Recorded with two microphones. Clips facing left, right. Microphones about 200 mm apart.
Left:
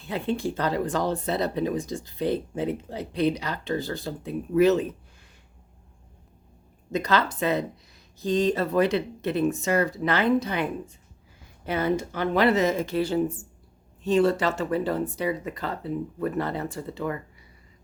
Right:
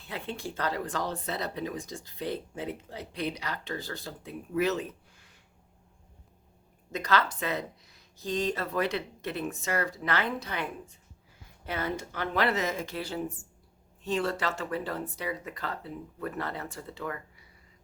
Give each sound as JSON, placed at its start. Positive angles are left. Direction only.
{"t": 0.0, "sound": "speech", "side_deg": 25}
{"t": 6.9, "sound": "speech", "side_deg": 20}